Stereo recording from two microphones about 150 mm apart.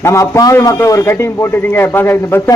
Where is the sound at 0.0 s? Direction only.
20° left (ahead or behind).